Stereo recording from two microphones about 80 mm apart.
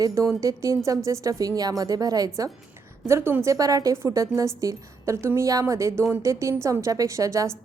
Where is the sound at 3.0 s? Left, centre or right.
Right.